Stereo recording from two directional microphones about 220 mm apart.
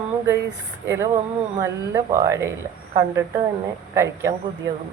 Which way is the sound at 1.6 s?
15° right (ahead or behind).